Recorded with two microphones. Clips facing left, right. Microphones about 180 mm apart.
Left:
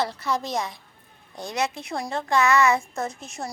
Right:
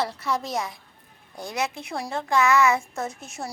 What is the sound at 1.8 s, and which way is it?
A woman's voice, 5° right (ahead or behind).